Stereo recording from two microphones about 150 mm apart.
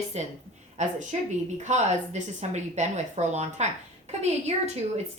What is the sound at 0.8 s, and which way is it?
Speech, 50° right (ahead or behind).